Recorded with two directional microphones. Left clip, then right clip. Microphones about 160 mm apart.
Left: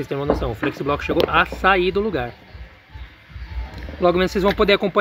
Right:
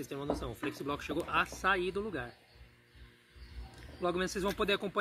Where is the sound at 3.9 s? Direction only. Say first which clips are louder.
Left 16 dB; 10° right (ahead or behind).